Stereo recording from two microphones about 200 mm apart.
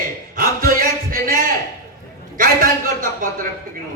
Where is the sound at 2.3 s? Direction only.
45° right (ahead or behind).